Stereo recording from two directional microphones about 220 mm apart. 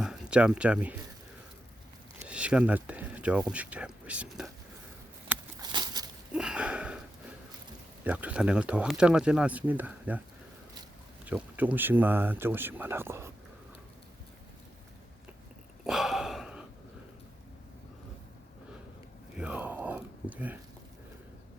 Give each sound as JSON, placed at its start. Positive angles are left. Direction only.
{"t": 0.0, "sound": "speech", "side_deg": -5}
{"t": 2.1, "sound": "speech", "side_deg": -5}
{"t": 5.3, "sound": "a sound", "side_deg": -15}
{"t": 6.3, "sound": "sniff", "side_deg": -5}
{"t": 8.0, "sound": "speech", "side_deg": -5}
{"t": 11.3, "sound": "speech", "side_deg": -5}
{"t": 15.8, "sound": "gasp", "side_deg": 0}
{"t": 19.4, "sound": "a sound", "side_deg": -5}